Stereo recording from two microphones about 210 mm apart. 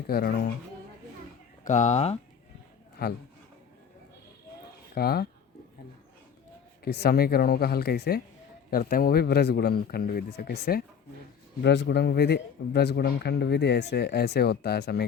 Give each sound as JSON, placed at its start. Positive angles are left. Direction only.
{"t": 0.1, "sound": "a man's voice", "side_deg": 50}
{"t": 1.6, "sound": "speech", "side_deg": 35}
{"t": 3.0, "sound": "a man's voice", "side_deg": 50}
{"t": 4.9, "sound": "a man's voice", "side_deg": 45}
{"t": 6.8, "sound": "a man's voice", "side_deg": 50}